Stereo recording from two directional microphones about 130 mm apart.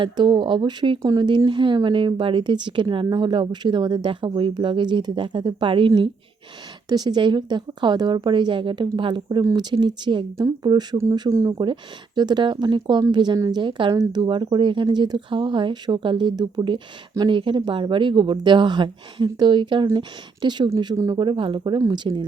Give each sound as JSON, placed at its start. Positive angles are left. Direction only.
{"t": 0.0, "sound": "speech", "side_deg": -40}
{"t": 11.5, "sound": "speech", "side_deg": -40}